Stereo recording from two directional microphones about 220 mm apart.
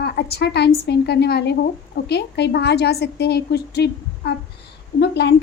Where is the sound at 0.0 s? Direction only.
50° left (ahead or behind).